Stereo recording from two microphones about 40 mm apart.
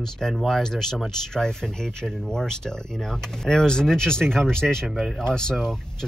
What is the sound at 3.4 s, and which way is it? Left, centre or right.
Speech, centre.